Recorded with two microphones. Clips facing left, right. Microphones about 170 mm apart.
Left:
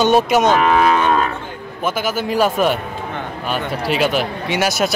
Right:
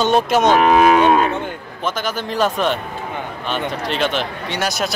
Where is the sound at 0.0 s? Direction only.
5° left (ahead or behind).